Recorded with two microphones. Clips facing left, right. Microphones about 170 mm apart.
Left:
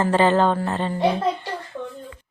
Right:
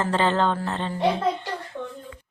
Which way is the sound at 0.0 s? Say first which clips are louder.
Left 4 dB; 15° left (ahead or behind).